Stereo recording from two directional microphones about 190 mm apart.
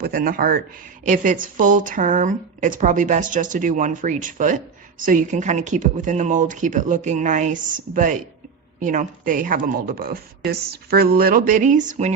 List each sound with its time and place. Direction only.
0.0 s speech: 50° right (ahead or behind)